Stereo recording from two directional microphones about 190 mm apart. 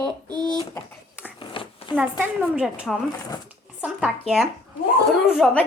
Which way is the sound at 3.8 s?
5° right (ahead or behind).